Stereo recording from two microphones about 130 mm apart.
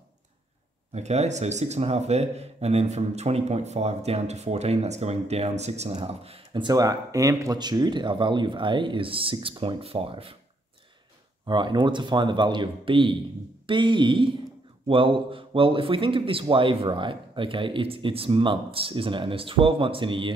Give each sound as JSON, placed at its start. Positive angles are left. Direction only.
{"t": 0.9, "sound": "speech", "side_deg": -60}
{"t": 11.4, "sound": "a man's voice", "side_deg": -35}